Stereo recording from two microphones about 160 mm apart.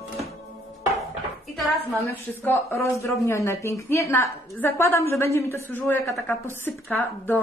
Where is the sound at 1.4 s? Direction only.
Centre (ahead or behind).